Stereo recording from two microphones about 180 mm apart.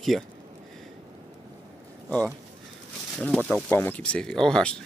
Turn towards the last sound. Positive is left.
turn(degrees=5)  # may be behind; listen again after turning